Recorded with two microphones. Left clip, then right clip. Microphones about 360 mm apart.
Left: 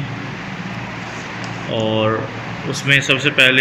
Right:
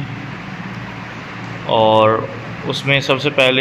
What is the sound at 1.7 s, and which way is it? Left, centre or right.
Speech, right.